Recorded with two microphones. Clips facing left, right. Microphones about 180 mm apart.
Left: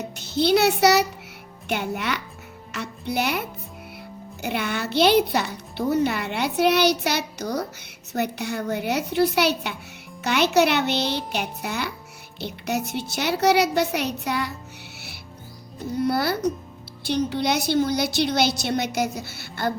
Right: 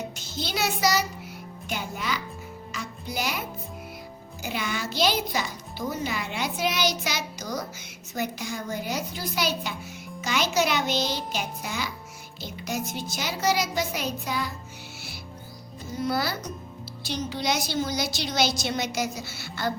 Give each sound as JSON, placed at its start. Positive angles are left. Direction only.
{"t": 0.3, "sound": "a child's voice", "side_deg": 65}
{"t": 4.4, "sound": "a child's voice", "side_deg": 60}
{"t": 15.8, "sound": "a child's voice", "side_deg": 60}